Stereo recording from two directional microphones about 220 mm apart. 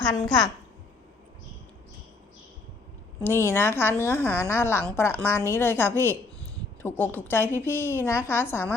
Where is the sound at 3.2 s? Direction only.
10° left (ahead or behind).